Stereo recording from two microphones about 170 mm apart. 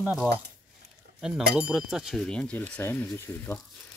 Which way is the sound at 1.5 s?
Centre (ahead or behind).